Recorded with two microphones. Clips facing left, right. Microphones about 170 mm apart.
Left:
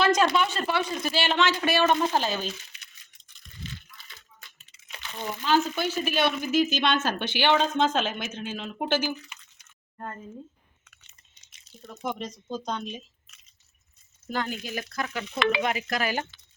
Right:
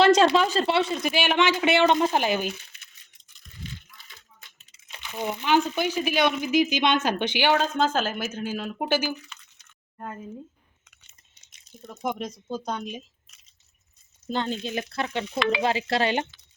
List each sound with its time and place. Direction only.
0.3 s speech: 35° right (ahead or behind)
1.1 s speech: 15° right (ahead or behind)
4.9 s speech: 15° right (ahead or behind)
9.0 s drip: 15° left (ahead or behind)
10.0 s speech: 5° right (ahead or behind)
11.7 s speech: 15° right (ahead or behind)
14.3 s speech: 25° right (ahead or behind)